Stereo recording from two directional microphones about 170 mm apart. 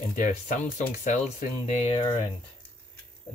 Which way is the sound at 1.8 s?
30° left (ahead or behind).